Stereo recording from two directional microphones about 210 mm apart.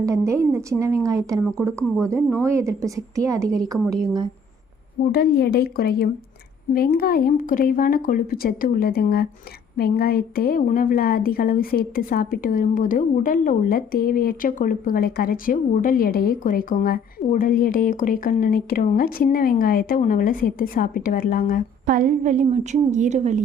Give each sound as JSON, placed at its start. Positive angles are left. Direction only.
{"t": 0.0, "sound": "a woman's voice", "side_deg": -15}
{"t": 5.1, "sound": "a woman's voice", "side_deg": 50}
{"t": 21.8, "sound": "a woman's voice", "side_deg": -40}